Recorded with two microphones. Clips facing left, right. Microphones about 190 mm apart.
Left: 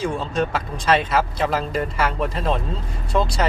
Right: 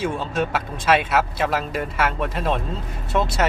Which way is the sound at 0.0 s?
5° right (ahead or behind).